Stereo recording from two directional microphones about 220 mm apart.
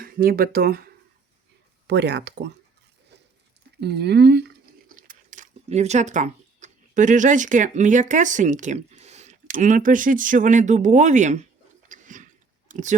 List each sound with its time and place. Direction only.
0.0 s speech: 40° right (ahead or behind)
1.9 s speech: 50° right (ahead or behind)
3.8 s speech: 45° right (ahead or behind)
11.9 s chewing: 35° right (ahead or behind)